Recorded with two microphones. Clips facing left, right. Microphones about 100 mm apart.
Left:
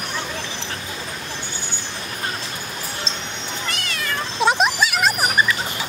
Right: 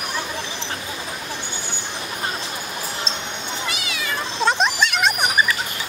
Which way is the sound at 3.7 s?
5° right (ahead or behind).